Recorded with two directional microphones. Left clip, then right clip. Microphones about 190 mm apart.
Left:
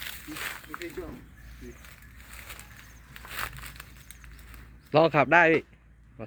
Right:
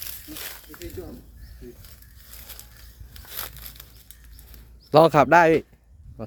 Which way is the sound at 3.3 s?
40° right (ahead or behind).